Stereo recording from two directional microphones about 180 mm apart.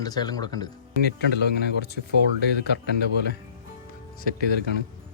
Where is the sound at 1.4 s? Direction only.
65° left (ahead or behind).